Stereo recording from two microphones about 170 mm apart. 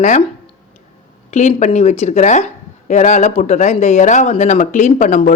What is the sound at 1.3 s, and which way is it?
Speech, 40° left (ahead or behind).